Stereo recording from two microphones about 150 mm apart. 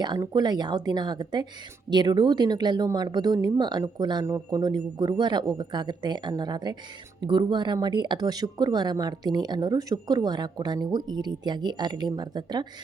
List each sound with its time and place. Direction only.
0.0 s speech: 30° right (ahead or behind)